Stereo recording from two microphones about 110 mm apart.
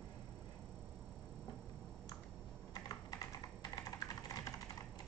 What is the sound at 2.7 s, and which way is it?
Typing, 35° left (ahead or behind).